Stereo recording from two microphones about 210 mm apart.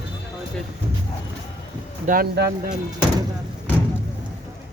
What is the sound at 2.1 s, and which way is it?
Speech, 50° right (ahead or behind).